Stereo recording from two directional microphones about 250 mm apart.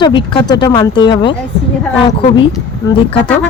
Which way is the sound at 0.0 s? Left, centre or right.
Centre.